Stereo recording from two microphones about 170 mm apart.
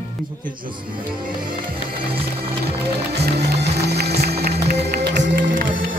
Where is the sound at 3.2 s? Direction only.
70° right (ahead or behind).